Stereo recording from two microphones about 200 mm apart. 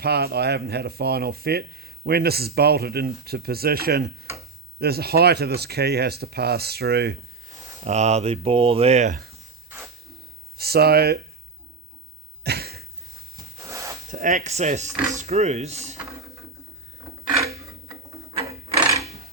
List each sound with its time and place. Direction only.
0.0 s speech: 55° right (ahead or behind)
7.9 s speech: 35° right (ahead or behind)
10.6 s speech: 50° right (ahead or behind)
12.4 s cough: 55° right (ahead or behind)
13.3 s a sound: 15° right (ahead or behind)
14.1 s speech: 40° right (ahead or behind)